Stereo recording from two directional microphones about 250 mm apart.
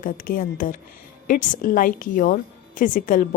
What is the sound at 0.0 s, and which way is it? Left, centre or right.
A woman's voice, left.